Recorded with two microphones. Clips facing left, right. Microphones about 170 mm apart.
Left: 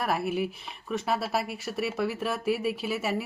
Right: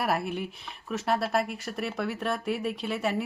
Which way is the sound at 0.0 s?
Centre (ahead or behind).